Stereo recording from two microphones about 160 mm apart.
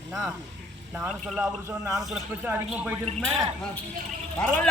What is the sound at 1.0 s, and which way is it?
Speech, centre (ahead or behind).